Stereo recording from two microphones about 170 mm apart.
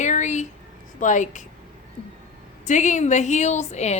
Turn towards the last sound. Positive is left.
turn(degrees=40)  # may be behind; listen again after turning